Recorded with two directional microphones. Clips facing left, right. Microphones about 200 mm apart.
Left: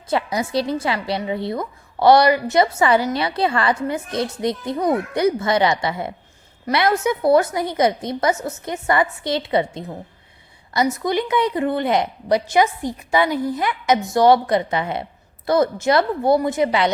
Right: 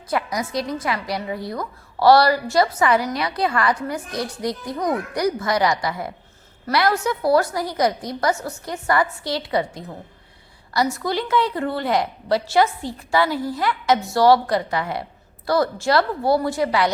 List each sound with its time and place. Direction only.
0.1 s a woman's voice: 25° left (ahead or behind)